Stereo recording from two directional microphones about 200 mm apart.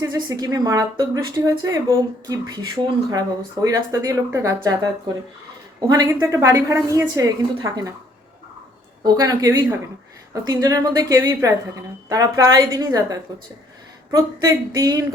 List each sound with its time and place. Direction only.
0.0 s a woman's voice: 20° right (ahead or behind)
5.9 s a woman's voice: 15° right (ahead or behind)
9.0 s a woman's voice: 15° right (ahead or behind)